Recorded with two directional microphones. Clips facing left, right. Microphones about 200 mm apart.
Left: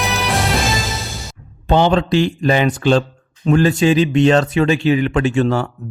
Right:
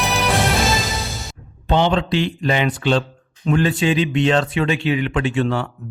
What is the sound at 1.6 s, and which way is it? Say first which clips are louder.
Speech: left 3 dB; 45° left (ahead or behind).